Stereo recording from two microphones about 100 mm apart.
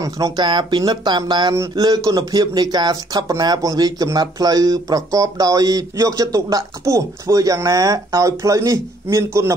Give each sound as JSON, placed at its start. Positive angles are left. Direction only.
{"t": 0.0, "sound": "speech", "side_deg": -45}